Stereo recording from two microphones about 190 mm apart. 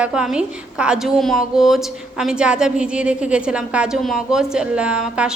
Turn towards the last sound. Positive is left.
turn(degrees=-5)  # may be behind; listen again after turning